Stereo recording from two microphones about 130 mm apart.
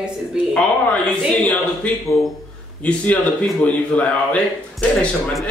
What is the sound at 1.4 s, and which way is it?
A man's voice, 10° left (ahead or behind).